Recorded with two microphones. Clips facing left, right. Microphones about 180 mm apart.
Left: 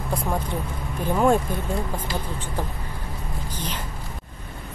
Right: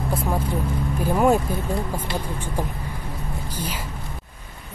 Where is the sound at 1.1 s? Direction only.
5° right (ahead or behind).